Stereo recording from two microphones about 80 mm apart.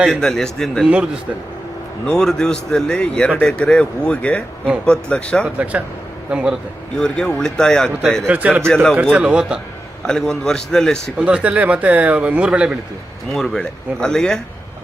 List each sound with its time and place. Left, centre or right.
0.1 s speech: centre
0.9 s speech: centre
2.0 s speech: centre
6.3 s speech: centre
6.9 s speech: centre
8.3 s speech: centre
8.6 s speech: centre
9.1 s speech: centre
10.1 s speech: centre
11.2 s speech: centre
13.3 s speech: centre